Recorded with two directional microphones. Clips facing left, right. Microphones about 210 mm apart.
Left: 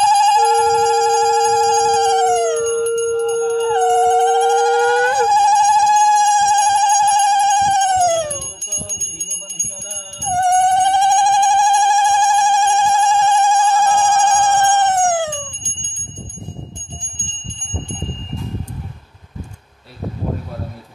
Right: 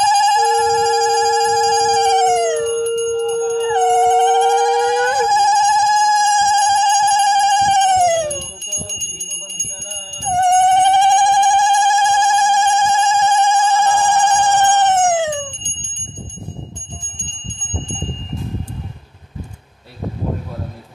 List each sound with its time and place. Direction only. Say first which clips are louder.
0.0 s telephone bell ringing: left 1 dB; 15° right (ahead or behind)
3.3 s howl: left 1 dB; centre (ahead or behind)
3.7 s telephone bell ringing: right 1 dB; 20° right (ahead or behind)
6.2 s ringtone: even; 20° right (ahead or behind)
8.4 s music: right 1 dB; centre (ahead or behind)
10.3 s a sound: right 1 dB; 20° right (ahead or behind)